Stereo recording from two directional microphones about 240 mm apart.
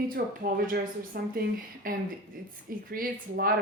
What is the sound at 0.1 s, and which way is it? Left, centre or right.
A woman's voice, right.